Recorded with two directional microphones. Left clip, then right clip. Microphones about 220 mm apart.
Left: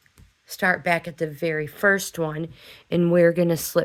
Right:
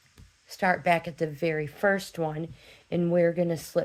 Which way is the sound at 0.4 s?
25° left (ahead or behind).